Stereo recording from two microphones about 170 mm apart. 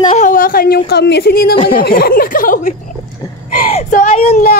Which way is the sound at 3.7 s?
45° left (ahead or behind).